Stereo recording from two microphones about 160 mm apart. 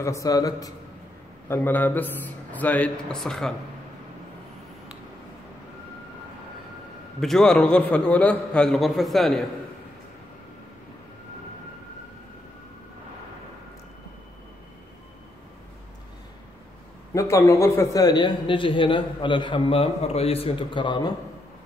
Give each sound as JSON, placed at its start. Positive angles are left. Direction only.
{"t": 0.0, "sound": "a man's voice", "side_deg": 20}
{"t": 7.2, "sound": "a man's voice", "side_deg": 0}
{"t": 17.1, "sound": "a man's voice", "side_deg": 20}